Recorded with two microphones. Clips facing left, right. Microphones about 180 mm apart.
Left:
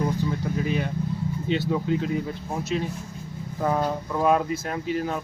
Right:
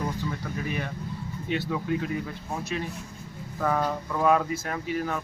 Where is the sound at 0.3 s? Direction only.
15° left (ahead or behind).